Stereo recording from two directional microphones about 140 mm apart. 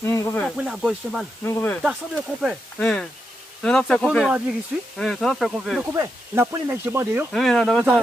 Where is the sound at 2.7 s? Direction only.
5° left (ahead or behind).